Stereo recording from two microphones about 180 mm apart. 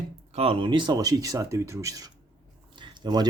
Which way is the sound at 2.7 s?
25° right (ahead or behind).